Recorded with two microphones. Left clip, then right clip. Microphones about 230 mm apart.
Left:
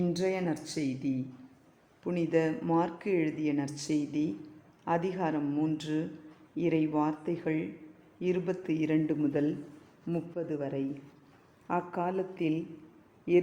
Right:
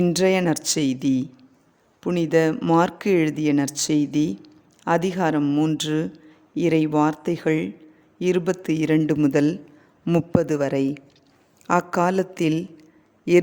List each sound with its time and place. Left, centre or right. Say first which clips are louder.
0.0 s speech: right 11 dB; right